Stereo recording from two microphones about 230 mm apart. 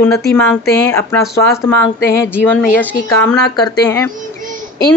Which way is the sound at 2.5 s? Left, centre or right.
Centre.